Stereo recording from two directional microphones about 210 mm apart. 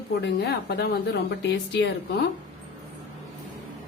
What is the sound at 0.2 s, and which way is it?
A woman's voice, 55° left (ahead or behind).